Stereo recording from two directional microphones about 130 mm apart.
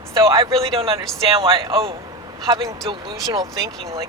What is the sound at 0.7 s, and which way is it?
Speech, 45° right (ahead or behind).